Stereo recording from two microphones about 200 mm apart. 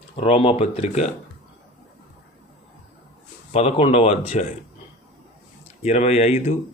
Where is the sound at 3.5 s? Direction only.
30° left (ahead or behind).